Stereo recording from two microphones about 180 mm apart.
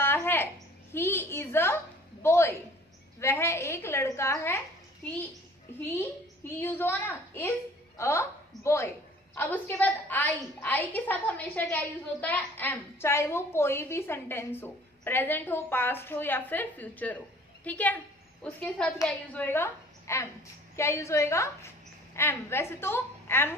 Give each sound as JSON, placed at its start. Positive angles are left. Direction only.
{"t": 0.0, "sound": "a sound", "side_deg": 10}
{"t": 0.9, "sound": "a woman's voice", "side_deg": 15}
{"t": 5.8, "sound": "a woman's voice", "side_deg": 10}